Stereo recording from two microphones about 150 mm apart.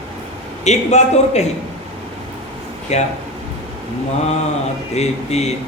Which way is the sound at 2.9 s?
50° left (ahead or behind).